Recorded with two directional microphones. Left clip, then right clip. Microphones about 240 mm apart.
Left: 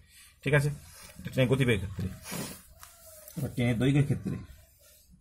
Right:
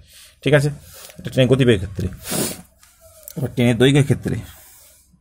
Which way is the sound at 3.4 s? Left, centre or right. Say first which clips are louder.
Right 14 dB; right.